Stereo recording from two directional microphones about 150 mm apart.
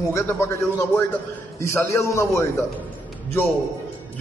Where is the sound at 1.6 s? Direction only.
20° left (ahead or behind).